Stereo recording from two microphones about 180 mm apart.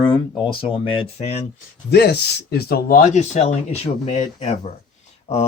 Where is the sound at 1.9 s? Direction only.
65° left (ahead or behind).